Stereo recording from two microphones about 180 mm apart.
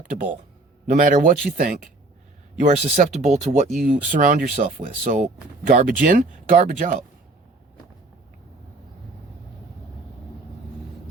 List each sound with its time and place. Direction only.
0.9 s speech: 45° right (ahead or behind)
2.6 s speech: 40° right (ahead or behind)